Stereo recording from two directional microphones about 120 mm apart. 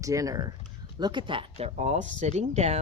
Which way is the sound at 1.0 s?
40° right (ahead or behind).